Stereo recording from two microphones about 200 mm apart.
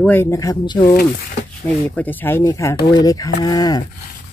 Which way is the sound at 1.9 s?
10° left (ahead or behind).